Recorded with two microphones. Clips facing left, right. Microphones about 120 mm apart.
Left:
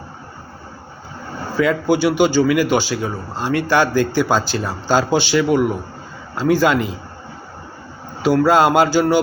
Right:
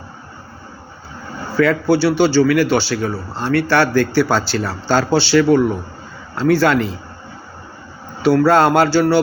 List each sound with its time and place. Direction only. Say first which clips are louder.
1.5 s a man's voice: right 2 dB; 15° left (ahead or behind)
8.2 s a man's voice: right 1 dB; 15° left (ahead or behind)